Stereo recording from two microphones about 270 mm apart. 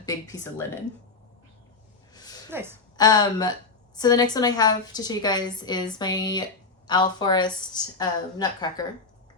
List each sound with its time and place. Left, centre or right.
0.0 s a woman's voice: centre
2.1 s a sound: centre
2.5 s a woman's voice: centre
3.0 s a woman's voice: centre